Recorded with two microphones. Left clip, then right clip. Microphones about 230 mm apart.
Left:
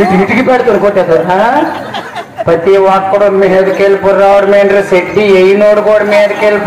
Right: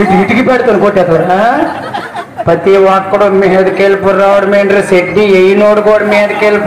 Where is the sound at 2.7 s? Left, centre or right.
Right.